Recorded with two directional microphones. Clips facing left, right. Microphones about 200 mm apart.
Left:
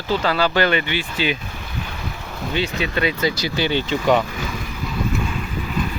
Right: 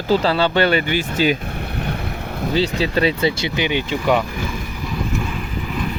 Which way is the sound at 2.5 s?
35° right (ahead or behind).